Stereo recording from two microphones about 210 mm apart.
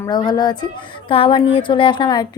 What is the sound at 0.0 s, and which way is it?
Speech, 20° left (ahead or behind).